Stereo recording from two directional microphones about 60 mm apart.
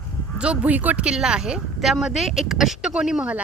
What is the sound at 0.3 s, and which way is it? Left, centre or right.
Speech, centre.